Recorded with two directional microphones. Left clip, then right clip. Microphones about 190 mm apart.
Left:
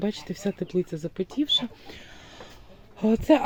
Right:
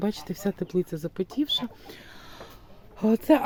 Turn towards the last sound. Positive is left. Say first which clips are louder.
# left 1 dB
turn(degrees=0)  # may be behind; listen again after turning